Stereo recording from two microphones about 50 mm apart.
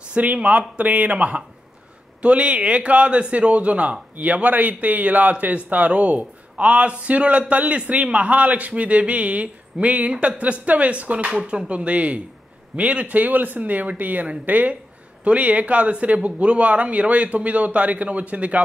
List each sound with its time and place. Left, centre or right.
0.1 s a man's voice: right